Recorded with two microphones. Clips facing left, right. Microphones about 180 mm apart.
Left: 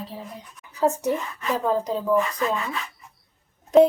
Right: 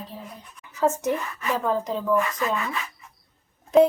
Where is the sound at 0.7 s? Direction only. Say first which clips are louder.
Left 1 dB; 15° left (ahead or behind).